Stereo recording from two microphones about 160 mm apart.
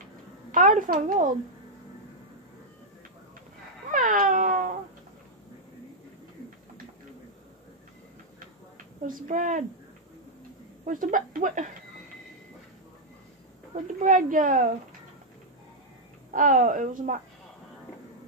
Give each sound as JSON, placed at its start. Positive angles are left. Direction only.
{"t": 0.5, "sound": "speech", "side_deg": -55}
{"t": 3.9, "sound": "cat", "side_deg": -55}
{"t": 9.0, "sound": "speech", "side_deg": -55}
{"t": 10.9, "sound": "speech", "side_deg": -60}
{"t": 14.0, "sound": "speech", "side_deg": -55}
{"t": 16.3, "sound": "a woman's voice", "side_deg": -55}